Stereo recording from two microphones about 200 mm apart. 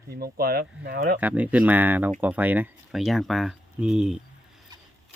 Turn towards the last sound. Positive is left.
turn(degrees=-5)  # may be behind; listen again after turning